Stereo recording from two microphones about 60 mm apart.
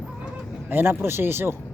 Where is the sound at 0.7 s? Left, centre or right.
Right.